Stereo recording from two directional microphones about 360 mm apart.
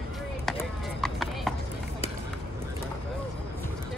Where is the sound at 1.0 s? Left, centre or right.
Centre.